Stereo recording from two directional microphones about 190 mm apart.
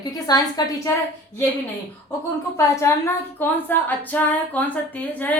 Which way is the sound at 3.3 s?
10° left (ahead or behind).